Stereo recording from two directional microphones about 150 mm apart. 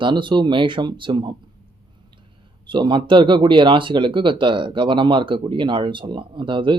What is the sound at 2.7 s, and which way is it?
Speech, 35° right (ahead or behind).